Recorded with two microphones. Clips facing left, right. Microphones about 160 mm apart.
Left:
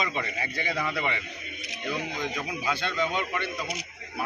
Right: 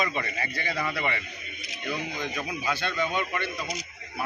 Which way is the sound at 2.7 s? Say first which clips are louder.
Even; 15° left (ahead or behind).